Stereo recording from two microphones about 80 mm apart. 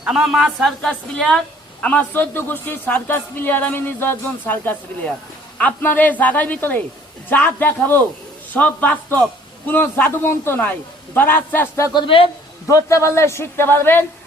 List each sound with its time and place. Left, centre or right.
0.0 s speech: centre
0.6 s a woman's voice: centre
11.9 s speech: left
12.6 s a man's voice: left